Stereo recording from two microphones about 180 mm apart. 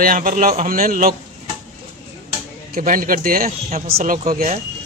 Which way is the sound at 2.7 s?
50° right (ahead or behind).